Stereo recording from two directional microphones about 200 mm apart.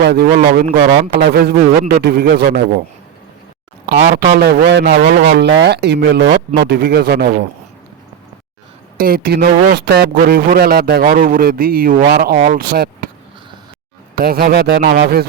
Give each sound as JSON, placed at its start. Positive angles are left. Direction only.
{"t": 0.0, "sound": "a man's voice", "side_deg": -55}
{"t": 4.0, "sound": "a man's voice", "side_deg": -45}
{"t": 9.0, "sound": "a man's voice", "side_deg": -45}
{"t": 14.2, "sound": "a man's voice", "side_deg": -50}